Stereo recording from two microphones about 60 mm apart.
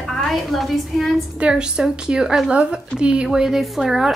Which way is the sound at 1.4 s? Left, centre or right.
Centre.